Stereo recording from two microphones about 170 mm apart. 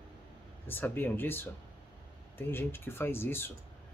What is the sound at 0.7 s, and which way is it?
Speech, 10° left (ahead or behind).